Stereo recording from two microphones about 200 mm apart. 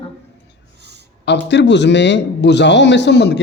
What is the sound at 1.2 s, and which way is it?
A man's voice, 60° left (ahead or behind).